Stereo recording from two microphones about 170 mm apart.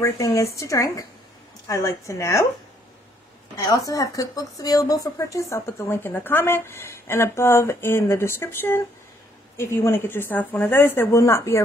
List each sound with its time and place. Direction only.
0.0 s speech: 15° left (ahead or behind)
3.5 s speech: 20° left (ahead or behind)